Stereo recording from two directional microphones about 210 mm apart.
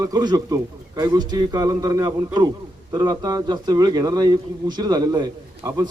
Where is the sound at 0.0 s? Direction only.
20° right (ahead or behind).